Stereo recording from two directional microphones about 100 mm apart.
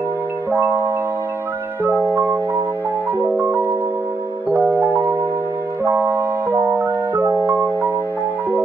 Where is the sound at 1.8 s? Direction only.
20° right (ahead or behind).